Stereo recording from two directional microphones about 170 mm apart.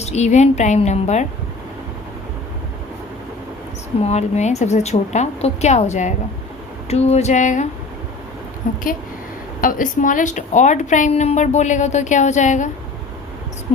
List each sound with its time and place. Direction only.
0.0 s a woman's voice: 40° left (ahead or behind)
4.0 s a woman's voice: 40° left (ahead or behind)